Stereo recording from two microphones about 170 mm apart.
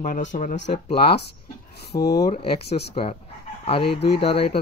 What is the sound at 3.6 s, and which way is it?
Speech, 35° left (ahead or behind).